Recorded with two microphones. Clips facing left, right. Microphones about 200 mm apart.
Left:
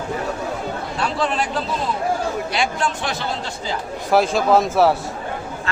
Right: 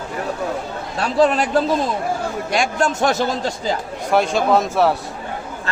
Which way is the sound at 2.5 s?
45° right (ahead or behind).